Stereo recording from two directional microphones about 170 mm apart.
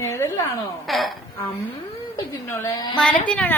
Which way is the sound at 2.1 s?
15° left (ahead or behind).